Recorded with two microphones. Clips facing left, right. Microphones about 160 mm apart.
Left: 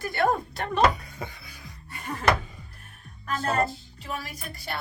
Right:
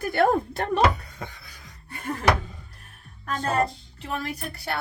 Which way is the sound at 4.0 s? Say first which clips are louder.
Right 5 dB; 65° right (ahead or behind).